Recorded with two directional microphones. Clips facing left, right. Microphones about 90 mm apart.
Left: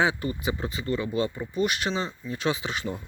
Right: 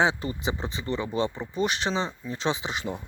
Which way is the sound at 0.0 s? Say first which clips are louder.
Even; 25° right (ahead or behind).